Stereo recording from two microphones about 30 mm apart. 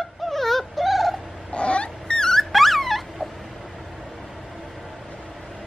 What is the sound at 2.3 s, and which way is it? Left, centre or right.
Dog, centre.